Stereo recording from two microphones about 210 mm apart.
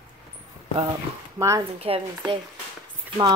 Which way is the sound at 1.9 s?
25° right (ahead or behind).